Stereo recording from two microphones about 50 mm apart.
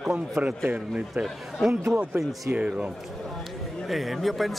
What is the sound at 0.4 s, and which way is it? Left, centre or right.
Speech, right.